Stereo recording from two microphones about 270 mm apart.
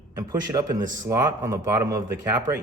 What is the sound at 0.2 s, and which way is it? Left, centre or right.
Speech, centre.